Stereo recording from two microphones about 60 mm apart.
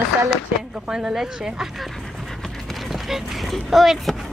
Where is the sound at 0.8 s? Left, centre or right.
Centre.